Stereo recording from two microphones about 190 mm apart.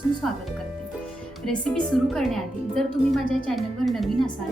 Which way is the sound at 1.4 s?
5° left (ahead or behind).